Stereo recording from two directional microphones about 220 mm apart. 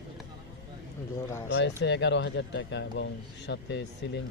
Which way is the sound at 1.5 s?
50° left (ahead or behind).